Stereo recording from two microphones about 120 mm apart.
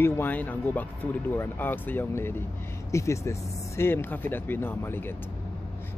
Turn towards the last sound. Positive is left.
turn(degrees=20)  # may be behind; listen again after turning